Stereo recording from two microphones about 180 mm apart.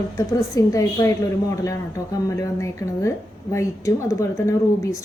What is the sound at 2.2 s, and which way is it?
A woman's voice, 15° left (ahead or behind).